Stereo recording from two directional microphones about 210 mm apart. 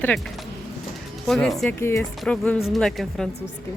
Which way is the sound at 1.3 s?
Centre (ahead or behind).